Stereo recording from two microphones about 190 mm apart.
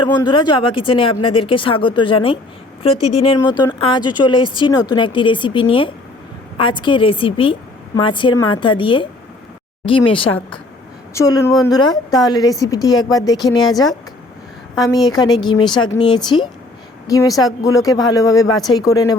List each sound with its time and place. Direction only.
0.0 s a woman's voice: 25° left (ahead or behind)
11.1 s a woman's voice: 15° left (ahead or behind)